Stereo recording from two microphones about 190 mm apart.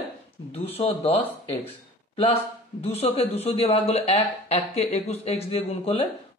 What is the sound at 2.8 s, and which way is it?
A woman's voice, 35° left (ahead or behind).